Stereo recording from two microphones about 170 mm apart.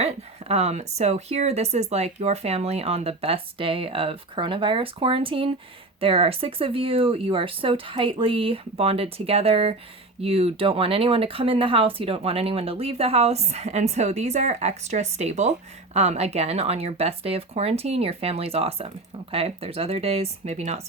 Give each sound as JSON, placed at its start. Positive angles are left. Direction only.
{"t": 0.0, "sound": "speech", "side_deg": -40}